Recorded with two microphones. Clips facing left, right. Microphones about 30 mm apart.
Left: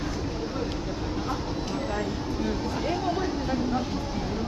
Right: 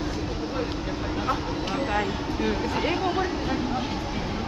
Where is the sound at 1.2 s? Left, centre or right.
Right.